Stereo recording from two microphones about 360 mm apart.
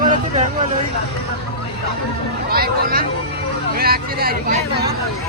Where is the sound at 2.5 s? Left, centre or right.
Right.